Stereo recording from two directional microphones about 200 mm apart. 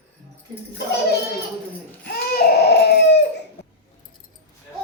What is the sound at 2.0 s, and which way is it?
Baby cry, 50° left (ahead or behind).